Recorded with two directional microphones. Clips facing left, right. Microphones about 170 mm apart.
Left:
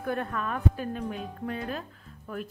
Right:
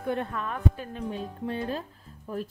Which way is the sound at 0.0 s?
25° right (ahead or behind).